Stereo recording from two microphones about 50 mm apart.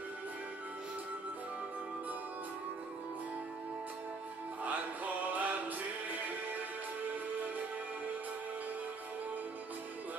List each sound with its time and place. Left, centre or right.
4.6 s music: right